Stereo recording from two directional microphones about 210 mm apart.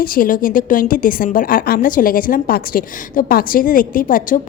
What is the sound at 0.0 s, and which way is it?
A woman's voice, 45° left (ahead or behind).